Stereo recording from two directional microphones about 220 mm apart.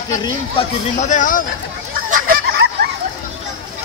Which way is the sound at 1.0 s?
35° left (ahead or behind).